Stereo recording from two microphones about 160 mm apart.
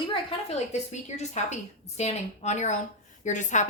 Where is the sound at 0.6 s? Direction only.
45° left (ahead or behind).